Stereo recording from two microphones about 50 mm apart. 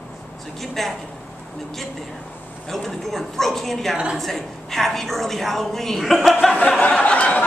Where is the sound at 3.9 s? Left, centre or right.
Centre.